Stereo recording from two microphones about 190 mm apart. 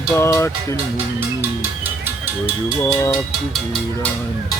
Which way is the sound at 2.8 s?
15° left (ahead or behind).